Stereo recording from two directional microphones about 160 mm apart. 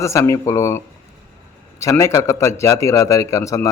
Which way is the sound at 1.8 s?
15° left (ahead or behind).